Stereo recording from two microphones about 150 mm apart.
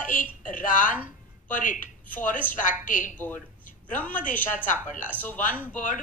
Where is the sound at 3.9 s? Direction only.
10° left (ahead or behind).